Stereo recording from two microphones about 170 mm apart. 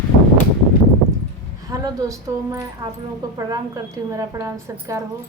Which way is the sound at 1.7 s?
20° right (ahead or behind).